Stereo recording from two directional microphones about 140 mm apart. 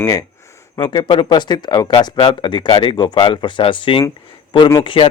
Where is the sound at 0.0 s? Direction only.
25° left (ahead or behind).